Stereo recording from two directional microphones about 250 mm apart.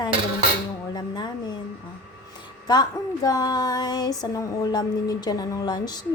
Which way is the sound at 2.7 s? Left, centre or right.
Centre.